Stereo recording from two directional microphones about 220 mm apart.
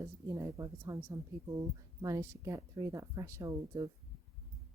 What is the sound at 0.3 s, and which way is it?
Speech, 15° right (ahead or behind).